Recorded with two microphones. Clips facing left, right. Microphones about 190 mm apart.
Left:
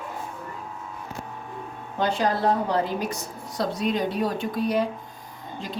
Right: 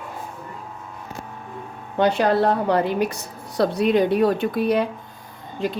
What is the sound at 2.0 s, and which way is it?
Speech, 65° right (ahead or behind).